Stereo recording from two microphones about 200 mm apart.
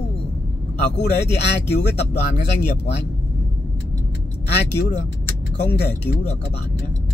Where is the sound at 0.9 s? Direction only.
55° left (ahead or behind).